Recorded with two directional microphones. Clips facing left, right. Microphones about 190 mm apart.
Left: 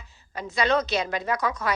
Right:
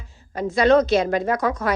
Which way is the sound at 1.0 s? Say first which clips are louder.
Right 6 dB; 50° right (ahead or behind).